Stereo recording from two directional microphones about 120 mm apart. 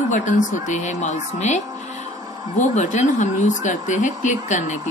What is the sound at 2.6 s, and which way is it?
A woman's voice, 85° left.